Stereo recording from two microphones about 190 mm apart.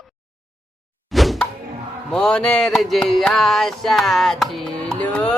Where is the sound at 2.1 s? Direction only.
5° left (ahead or behind).